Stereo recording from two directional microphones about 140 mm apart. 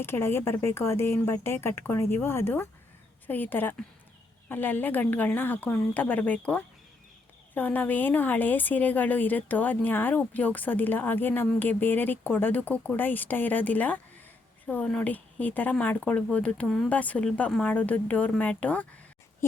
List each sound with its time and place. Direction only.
0.0 s a woman's voice: 15° left (ahead or behind)
16.6 s speech: centre (ahead or behind)
16.9 s a woman's voice: 10° left (ahead or behind)